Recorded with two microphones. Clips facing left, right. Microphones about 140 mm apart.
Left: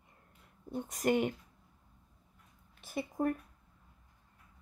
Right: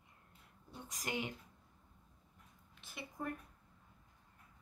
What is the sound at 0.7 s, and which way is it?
Speech, 55° left (ahead or behind).